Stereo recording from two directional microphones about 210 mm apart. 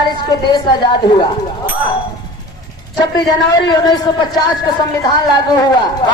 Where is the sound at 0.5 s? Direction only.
20° left (ahead or behind).